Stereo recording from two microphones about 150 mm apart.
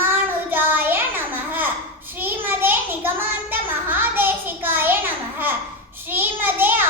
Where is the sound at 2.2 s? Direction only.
15° right (ahead or behind).